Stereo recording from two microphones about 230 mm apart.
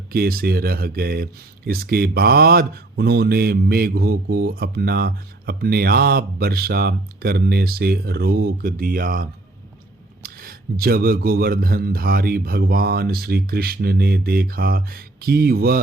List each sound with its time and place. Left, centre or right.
0.1 s speech: right